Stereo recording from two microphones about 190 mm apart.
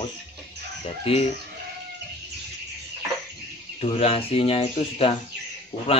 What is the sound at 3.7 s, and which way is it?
Speech, 30° left (ahead or behind).